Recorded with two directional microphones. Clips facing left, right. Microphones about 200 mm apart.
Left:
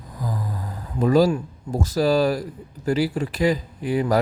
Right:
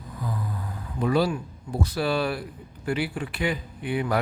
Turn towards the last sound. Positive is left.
turn(degrees=40)  # may be behind; listen again after turning